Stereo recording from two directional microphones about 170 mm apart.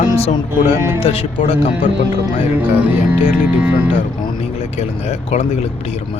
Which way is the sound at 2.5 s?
10° right (ahead or behind).